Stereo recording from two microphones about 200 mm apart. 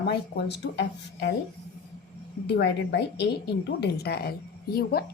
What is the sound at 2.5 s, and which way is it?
A woman's voice, 55° left (ahead or behind).